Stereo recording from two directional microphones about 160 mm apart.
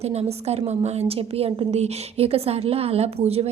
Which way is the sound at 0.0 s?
40° right (ahead or behind).